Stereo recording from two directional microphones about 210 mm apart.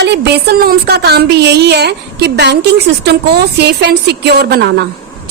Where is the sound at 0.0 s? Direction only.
50° right (ahead or behind).